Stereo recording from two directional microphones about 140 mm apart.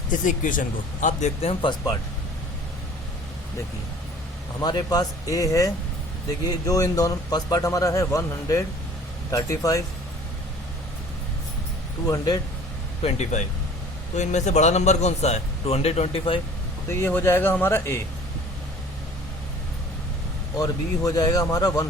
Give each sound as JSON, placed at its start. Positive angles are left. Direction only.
{"t": 0.1, "sound": "speech", "side_deg": 70}
{"t": 1.0, "sound": "a man's voice", "side_deg": 50}
{"t": 4.6, "sound": "a man's voice", "side_deg": 30}
{"t": 12.0, "sound": "a man's voice", "side_deg": 30}
{"t": 13.0, "sound": "a man's voice", "side_deg": 50}
{"t": 16.9, "sound": "speech", "side_deg": 15}
{"t": 20.6, "sound": "a man's voice", "side_deg": 25}